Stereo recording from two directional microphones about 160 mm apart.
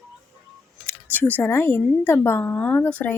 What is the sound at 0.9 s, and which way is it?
Speech, 10° left (ahead or behind).